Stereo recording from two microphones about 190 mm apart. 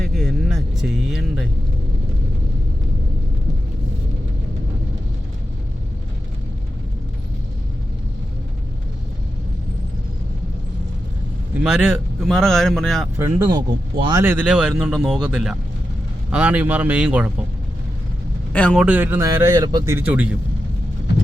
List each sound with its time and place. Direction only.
0.0 s vehicle: centre (ahead or behind)
11.5 s speech: 5° right (ahead or behind)
13.1 s speech: 20° right (ahead or behind)
14.3 s speech: 10° right (ahead or behind)
18.5 s speech: 5° left (ahead or behind)
18.9 s speech: 10° right (ahead or behind)